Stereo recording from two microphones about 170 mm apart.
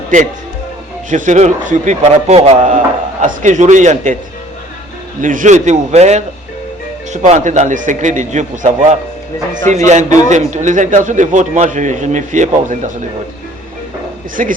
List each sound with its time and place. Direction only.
0.1 s a man's voice: 50° right (ahead or behind)
5.2 s a man's voice: 50° right (ahead or behind)
14.4 s a man's voice: 50° right (ahead or behind)